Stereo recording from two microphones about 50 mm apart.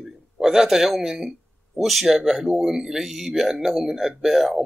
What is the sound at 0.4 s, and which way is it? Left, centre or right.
Speech, centre.